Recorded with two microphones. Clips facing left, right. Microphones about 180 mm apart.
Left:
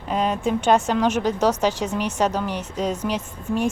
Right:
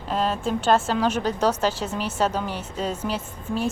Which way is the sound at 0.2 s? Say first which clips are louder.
Left 3 dB; 15° left (ahead or behind).